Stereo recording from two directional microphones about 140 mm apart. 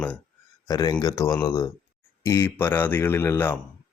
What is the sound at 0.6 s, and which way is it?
Speech, 25° left (ahead or behind).